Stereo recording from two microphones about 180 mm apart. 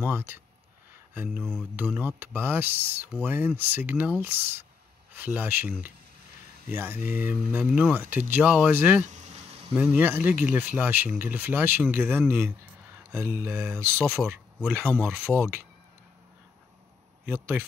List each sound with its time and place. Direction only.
0.0 s speech: 10° right (ahead or behind)
1.1 s a sound: 10° right (ahead or behind)
1.4 s speech: centre (ahead or behind)
1.8 s speech: 10° right (ahead or behind)
9.0 s a sound: 40° right (ahead or behind)
9.8 s speech: 10° right (ahead or behind)
17.3 s speech: 10° right (ahead or behind)